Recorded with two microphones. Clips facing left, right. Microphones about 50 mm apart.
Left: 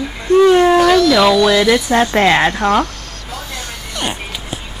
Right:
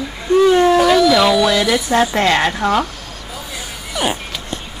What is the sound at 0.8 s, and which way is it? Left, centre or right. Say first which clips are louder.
Speech: left 1 dB; centre.